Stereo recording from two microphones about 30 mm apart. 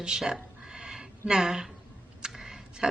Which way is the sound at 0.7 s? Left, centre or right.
Right.